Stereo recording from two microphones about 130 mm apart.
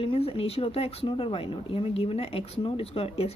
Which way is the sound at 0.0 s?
45° left (ahead or behind).